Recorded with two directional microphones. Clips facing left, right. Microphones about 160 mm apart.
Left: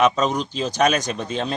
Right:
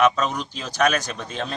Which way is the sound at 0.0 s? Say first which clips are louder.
Left 2 dB; 35° left (ahead or behind).